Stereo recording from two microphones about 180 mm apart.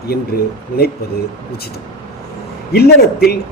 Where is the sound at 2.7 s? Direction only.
60° left (ahead or behind).